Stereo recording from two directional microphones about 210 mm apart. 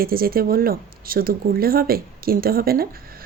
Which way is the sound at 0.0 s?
45° right (ahead or behind).